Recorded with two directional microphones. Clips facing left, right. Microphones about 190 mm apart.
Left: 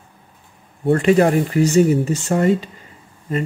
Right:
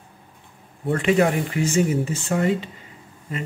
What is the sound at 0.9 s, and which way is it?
Speech, 40° left (ahead or behind).